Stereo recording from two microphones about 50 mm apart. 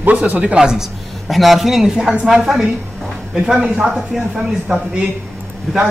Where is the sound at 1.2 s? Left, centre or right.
Centre.